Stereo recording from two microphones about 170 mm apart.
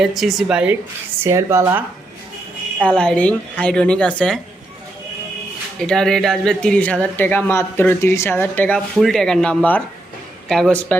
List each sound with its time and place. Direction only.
0.0 s a woman's voice: centre (ahead or behind); by 1.8 s 15° right (ahead or behind)
2.8 s speech: 5° left (ahead or behind)
5.8 s a woman's voice: 5° left (ahead or behind)